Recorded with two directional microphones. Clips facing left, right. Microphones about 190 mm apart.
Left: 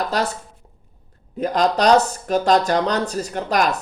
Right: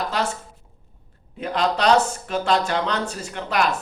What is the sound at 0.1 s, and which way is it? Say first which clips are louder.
Speech: left 3 dB; 40° left (ahead or behind).